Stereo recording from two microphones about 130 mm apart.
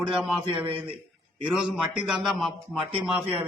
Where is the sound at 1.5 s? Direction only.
5° right (ahead or behind).